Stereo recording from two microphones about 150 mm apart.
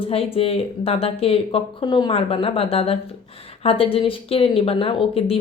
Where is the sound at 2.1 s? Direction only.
40° left (ahead or behind).